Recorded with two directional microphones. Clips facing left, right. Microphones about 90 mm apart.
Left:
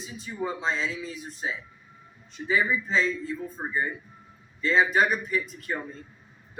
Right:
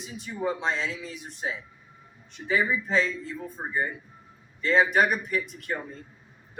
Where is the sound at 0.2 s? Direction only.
65° right (ahead or behind).